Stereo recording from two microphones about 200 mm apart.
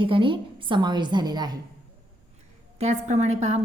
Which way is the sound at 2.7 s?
35° right (ahead or behind).